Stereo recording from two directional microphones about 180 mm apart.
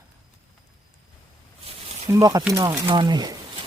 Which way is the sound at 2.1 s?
20° right (ahead or behind).